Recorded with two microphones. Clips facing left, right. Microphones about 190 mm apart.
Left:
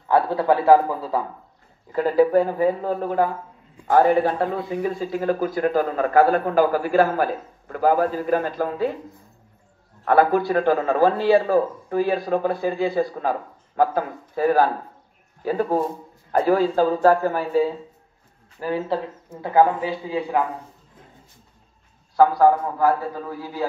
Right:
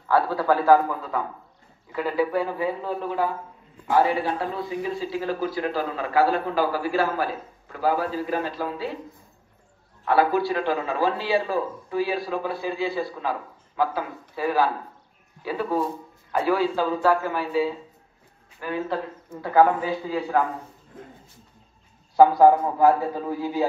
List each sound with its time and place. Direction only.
0.1 s a man's voice: 25° left (ahead or behind)
1.9 s a man's voice: 40° left (ahead or behind)
10.0 s a man's voice: 50° left (ahead or behind)
18.6 s speech: 30° left (ahead or behind)
19.4 s a man's voice: 20° left (ahead or behind)
22.1 s a man's voice: 20° right (ahead or behind)